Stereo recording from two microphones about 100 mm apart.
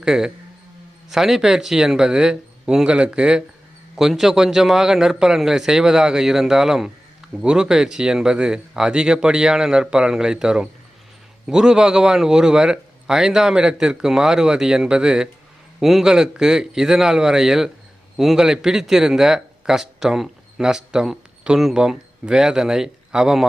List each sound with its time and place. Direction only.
0.0 s a man's voice: 5° right (ahead or behind)